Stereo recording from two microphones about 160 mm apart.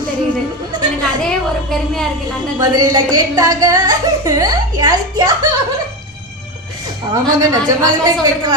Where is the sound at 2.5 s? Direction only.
25° right (ahead or behind).